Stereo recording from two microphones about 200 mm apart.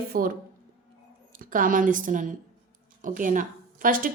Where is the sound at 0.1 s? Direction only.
45° right (ahead or behind).